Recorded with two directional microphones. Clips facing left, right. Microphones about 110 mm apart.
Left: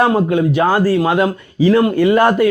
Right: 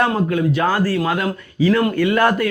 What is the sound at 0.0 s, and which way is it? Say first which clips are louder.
A man's voice: left 4 dB; 20° left (ahead or behind).